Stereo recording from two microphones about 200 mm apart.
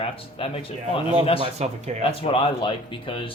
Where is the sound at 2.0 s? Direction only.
25° left (ahead or behind).